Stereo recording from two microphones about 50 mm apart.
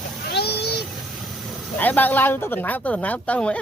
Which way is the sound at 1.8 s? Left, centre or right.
Left.